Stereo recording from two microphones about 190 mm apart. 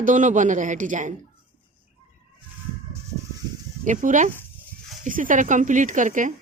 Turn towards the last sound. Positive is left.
turn(degrees=-40)  # may be behind; listen again after turning